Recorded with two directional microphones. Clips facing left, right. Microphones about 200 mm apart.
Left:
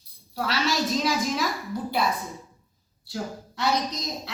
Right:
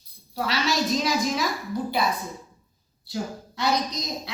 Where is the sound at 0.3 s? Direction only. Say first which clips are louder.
Right 1 dB; centre (ahead or behind).